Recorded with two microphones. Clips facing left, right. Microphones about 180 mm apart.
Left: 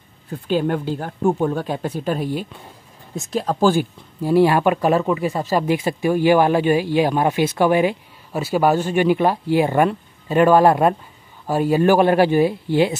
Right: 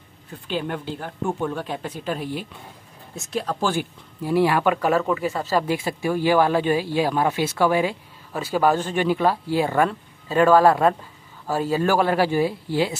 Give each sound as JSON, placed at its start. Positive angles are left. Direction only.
{"t": 0.5, "sound": "speech", "side_deg": 45}